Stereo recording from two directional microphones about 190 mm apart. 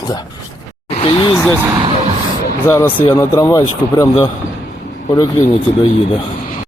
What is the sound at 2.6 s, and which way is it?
Speech, 15° left (ahead or behind).